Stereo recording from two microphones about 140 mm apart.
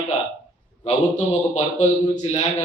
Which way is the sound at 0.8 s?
50° left (ahead or behind).